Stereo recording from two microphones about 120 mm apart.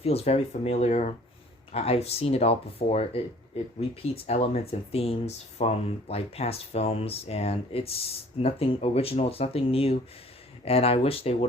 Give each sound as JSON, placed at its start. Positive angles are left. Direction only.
{"t": 0.0, "sound": "speech", "side_deg": 55}